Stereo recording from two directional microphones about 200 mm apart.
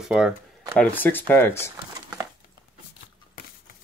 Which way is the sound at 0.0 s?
5° right (ahead or behind).